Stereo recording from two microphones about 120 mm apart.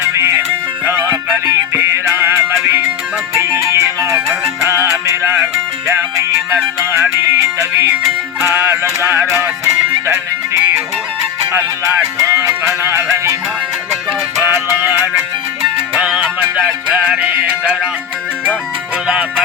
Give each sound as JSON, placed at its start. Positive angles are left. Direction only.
{"t": 1.3, "sound": "music", "side_deg": -20}
{"t": 12.2, "sound": "music", "side_deg": -25}
{"t": 14.3, "sound": "music", "side_deg": -20}
{"t": 16.0, "sound": "music", "side_deg": -10}